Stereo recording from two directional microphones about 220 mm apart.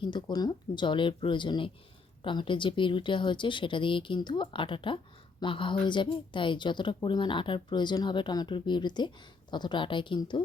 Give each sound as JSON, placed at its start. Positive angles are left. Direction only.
{"t": 0.0, "sound": "a woman's voice", "side_deg": 20}